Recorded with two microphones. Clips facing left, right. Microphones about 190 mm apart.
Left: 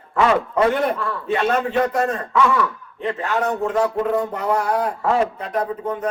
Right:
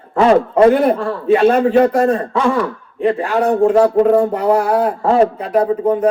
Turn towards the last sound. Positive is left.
turn(degrees=-30)  # may be behind; listen again after turning